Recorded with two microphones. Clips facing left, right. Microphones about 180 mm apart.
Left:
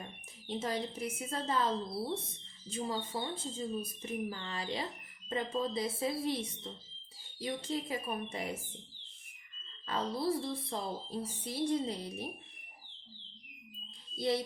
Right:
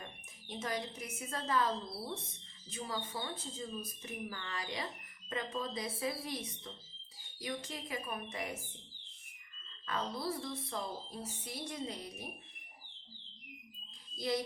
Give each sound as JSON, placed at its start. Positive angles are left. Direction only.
{"t": 0.4, "sound": "music", "side_deg": 30}
{"t": 9.8, "sound": "music", "side_deg": 30}
{"t": 14.2, "sound": "music", "side_deg": 30}